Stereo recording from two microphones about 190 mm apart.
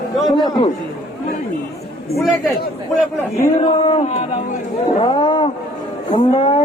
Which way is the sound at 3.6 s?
25° left (ahead or behind).